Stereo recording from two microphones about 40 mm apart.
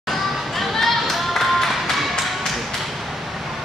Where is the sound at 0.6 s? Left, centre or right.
Centre.